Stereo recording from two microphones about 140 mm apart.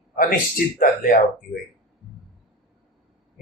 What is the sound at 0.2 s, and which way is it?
Speech, 90° left.